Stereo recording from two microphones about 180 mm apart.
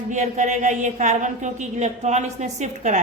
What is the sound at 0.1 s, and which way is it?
A woman's voice, 40° right (ahead or behind).